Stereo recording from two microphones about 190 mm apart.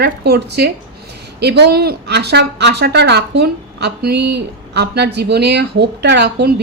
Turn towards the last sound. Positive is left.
turn(degrees=-60)  # may be behind; listen again after turning